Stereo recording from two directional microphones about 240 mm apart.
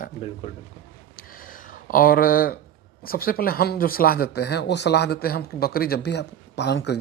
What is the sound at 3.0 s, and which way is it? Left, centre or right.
Speech, left.